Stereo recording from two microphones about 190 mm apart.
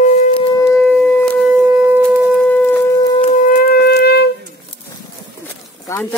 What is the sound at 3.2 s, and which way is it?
Wind instrument, 45° left (ahead or behind).